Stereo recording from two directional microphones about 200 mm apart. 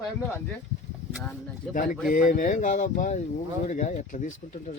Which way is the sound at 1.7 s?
40° left (ahead or behind).